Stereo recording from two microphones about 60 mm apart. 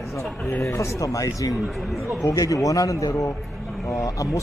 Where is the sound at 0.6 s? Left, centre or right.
Left.